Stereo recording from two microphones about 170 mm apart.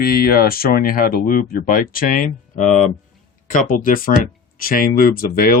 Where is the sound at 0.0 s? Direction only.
65° left (ahead or behind).